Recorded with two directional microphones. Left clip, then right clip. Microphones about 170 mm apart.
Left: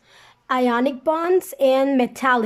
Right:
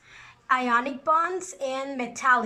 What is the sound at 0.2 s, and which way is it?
A woman's voice, 40° left (ahead or behind).